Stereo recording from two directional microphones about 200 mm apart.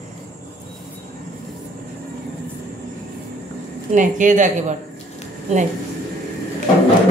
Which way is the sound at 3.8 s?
40° right (ahead or behind).